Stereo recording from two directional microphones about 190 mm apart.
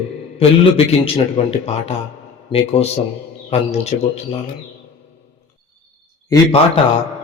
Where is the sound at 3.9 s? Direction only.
40° left (ahead or behind).